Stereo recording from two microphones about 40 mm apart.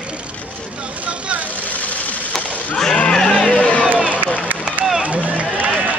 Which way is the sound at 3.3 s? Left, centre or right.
Left.